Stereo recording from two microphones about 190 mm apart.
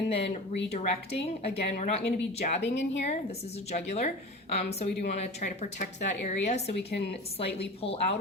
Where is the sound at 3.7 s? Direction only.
35° left (ahead or behind).